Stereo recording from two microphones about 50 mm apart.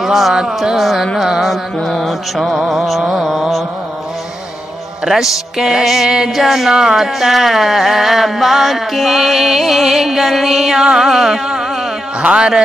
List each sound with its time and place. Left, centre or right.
0.0 s music: centre
5.0 s music: centre
12.2 s a man's voice: centre